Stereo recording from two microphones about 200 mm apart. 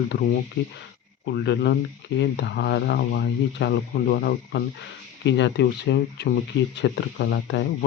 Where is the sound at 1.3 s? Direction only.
60° left (ahead or behind).